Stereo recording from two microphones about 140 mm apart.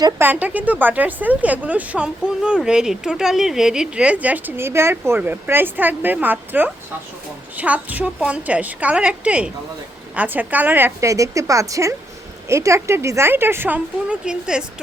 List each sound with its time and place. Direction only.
0.2 s a woman's voice: 10° right (ahead or behind)